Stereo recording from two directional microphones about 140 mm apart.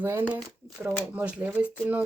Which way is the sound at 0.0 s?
15° right (ahead or behind).